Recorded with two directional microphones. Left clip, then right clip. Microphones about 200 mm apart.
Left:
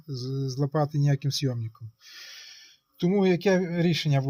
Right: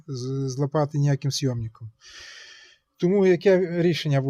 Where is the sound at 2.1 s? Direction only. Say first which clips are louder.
Right 1 dB; 45° right (ahead or behind).